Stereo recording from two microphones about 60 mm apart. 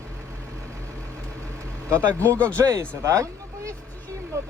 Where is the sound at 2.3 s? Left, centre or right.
Left.